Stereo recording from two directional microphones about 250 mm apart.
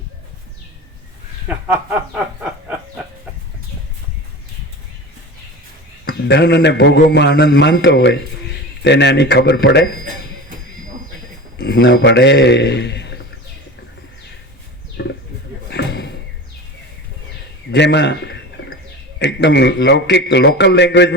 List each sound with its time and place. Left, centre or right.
1.5 s speech: centre
6.1 s a man's voice: left
11.5 s a man's voice: left
15.0 s a sound: left
15.7 s slam: left
17.7 s a man's voice: left